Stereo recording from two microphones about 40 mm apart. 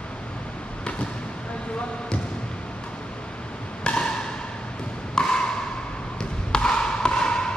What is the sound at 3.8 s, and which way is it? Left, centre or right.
Wood block, left.